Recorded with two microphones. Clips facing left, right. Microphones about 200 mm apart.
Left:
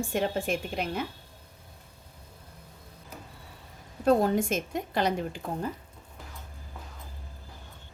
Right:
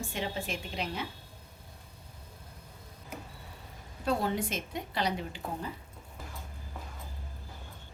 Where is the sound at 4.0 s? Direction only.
45° left (ahead or behind).